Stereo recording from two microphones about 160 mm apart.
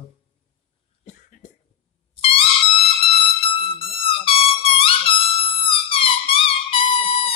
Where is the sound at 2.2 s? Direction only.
35° left (ahead or behind).